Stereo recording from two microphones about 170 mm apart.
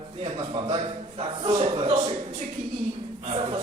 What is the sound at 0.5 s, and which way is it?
A man's voice, 30° right (ahead or behind).